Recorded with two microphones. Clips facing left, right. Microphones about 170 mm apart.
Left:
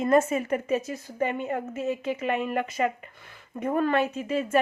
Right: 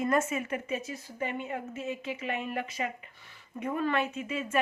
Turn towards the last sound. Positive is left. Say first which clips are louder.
# left 7 dB
turn(degrees=35)  # may be behind; listen again after turning